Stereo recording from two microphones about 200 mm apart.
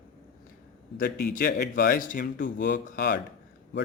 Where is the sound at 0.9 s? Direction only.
50° left (ahead or behind).